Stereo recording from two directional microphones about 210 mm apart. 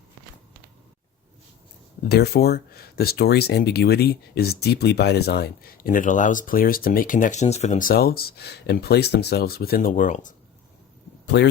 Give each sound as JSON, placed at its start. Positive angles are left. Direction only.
{"t": 2.0, "sound": "speech", "side_deg": 50}
{"t": 11.3, "sound": "speech", "side_deg": 55}